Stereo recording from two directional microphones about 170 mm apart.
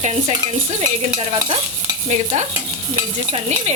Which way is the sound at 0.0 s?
40° right (ahead or behind).